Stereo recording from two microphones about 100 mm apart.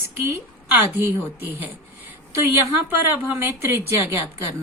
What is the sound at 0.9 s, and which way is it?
Speech, 20° right (ahead or behind).